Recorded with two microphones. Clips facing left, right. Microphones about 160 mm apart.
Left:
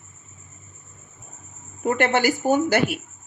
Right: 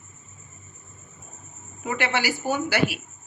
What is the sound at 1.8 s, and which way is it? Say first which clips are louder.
A woman's voice: left 6 dB; 50° left (ahead or behind).